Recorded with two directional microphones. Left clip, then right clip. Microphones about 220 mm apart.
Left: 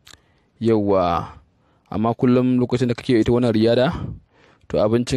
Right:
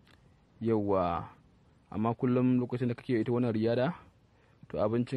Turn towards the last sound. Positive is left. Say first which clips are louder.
# left 12 dB
turn(degrees=50)  # may be behind; listen again after turning